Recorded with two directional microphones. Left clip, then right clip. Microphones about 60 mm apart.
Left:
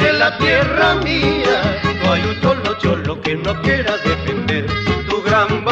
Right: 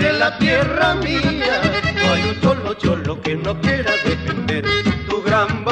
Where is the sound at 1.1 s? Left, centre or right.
Left.